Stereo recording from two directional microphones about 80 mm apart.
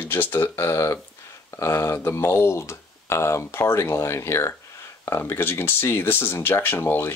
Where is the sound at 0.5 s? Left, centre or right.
Left.